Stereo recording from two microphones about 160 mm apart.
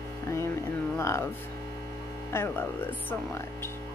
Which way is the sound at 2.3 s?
15° left (ahead or behind).